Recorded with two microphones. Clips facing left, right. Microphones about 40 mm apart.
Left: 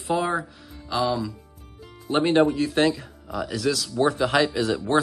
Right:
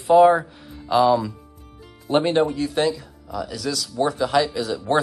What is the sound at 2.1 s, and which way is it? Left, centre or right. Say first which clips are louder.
Speech: even; centre.